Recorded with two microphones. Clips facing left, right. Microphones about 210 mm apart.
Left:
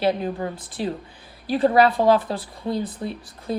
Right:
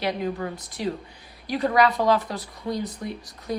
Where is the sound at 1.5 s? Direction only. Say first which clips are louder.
Left 4 dB; 30° left (ahead or behind).